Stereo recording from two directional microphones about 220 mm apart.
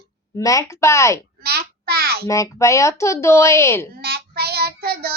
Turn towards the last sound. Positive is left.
turn(degrees=-45)  # may be behind; listen again after turning